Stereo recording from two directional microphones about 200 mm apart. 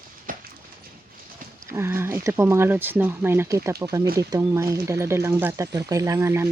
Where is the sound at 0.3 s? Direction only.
45° right (ahead or behind).